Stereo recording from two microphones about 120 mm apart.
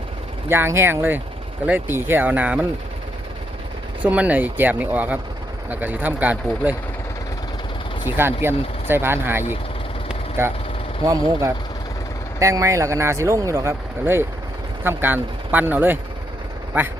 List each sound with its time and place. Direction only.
0.4 s speech: 20° right (ahead or behind)
4.0 s speech: 10° right (ahead or behind)
8.1 s speech: 20° right (ahead or behind)